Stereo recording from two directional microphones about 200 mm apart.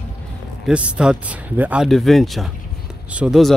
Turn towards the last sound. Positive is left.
turn(degrees=0)  # may be behind; listen again after turning